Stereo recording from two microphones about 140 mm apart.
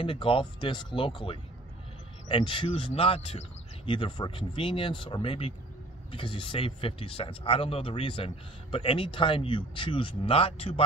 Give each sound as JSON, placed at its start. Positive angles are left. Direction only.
{"t": 0.0, "sound": "speech", "side_deg": 40}